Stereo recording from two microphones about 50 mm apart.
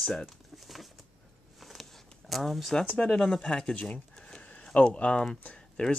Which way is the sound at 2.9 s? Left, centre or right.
Centre.